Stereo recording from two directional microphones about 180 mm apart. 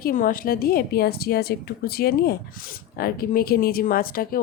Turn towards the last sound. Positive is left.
turn(degrees=55)  # may be behind; listen again after turning